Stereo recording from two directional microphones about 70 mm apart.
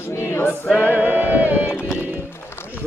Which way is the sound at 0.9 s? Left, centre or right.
Right.